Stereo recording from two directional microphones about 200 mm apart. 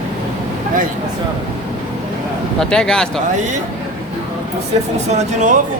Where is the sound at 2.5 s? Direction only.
5° left (ahead or behind).